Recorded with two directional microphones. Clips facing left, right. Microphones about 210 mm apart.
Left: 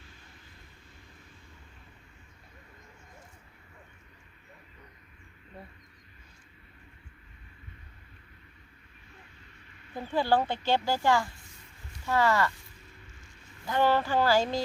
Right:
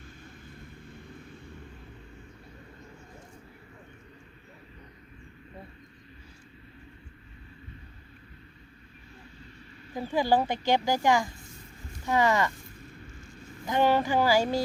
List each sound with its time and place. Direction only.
9.9 s speech: 10° right (ahead or behind)
13.7 s speech: 15° right (ahead or behind)